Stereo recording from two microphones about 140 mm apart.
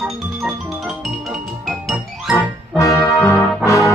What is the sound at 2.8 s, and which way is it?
Brass instrument, 25° left (ahead or behind).